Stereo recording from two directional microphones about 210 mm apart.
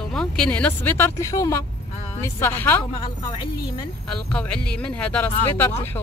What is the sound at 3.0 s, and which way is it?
Speech, 25° left (ahead or behind).